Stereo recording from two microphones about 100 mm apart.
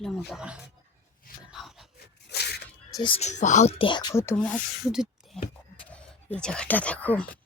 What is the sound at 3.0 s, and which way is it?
Speech, 60° left (ahead or behind).